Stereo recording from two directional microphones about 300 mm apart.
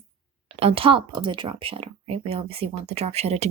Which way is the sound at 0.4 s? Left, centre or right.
Centre.